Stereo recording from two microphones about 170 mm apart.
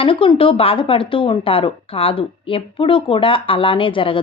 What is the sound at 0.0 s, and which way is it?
Speech, 30° left (ahead or behind).